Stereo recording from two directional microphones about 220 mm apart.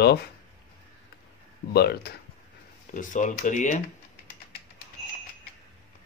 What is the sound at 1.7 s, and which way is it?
Speech, 45° left (ahead or behind).